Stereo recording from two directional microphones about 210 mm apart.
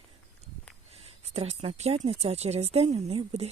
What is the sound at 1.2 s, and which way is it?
Speech, 30° right (ahead or behind).